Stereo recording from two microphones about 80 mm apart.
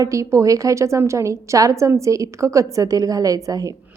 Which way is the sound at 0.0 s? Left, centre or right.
Right.